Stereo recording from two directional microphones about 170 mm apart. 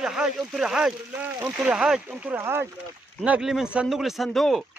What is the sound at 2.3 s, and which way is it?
Speech, 15° right (ahead or behind).